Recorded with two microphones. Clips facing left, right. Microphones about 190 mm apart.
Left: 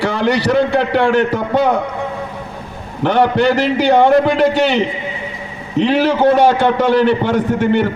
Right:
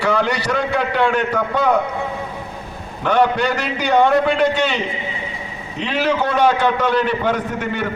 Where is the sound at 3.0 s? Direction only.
30° left (ahead or behind).